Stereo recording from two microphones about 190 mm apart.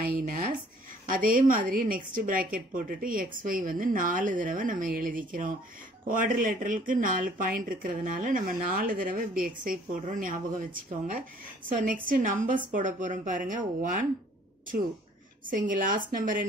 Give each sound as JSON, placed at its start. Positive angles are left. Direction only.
{"t": 0.0, "sound": "a woman's voice", "side_deg": -50}
{"t": 11.7, "sound": "a woman's voice", "side_deg": -45}
{"t": 15.5, "sound": "a woman's voice", "side_deg": -45}